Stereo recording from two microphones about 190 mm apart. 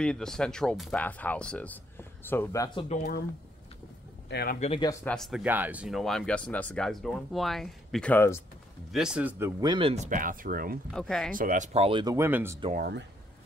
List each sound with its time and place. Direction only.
0.0 s speech: 5° left (ahead or behind); by 2.9 s 20° left (ahead or behind)
2.9 s speech: 50° left (ahead or behind)
4.3 s speech: 60° left (ahead or behind)
4.6 s speech: 30° left (ahead or behind)
5.0 s speech: centre (ahead or behind)
8.9 s speech: 5° right (ahead or behind)
9.6 s speech: 25° right (ahead or behind)
10.0 s speech: 45° right (ahead or behind)
10.9 s speech: 5° left (ahead or behind)
11.3 s speech: 45° right (ahead or behind); by 12.5 s 10° right (ahead or behind)
12.7 s speech: 55° right (ahead or behind)